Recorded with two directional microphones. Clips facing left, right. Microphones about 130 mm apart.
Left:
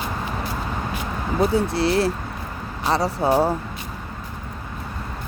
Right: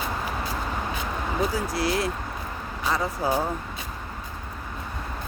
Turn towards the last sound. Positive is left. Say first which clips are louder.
# left 6 dB
turn(degrees=30)  # may be behind; listen again after turning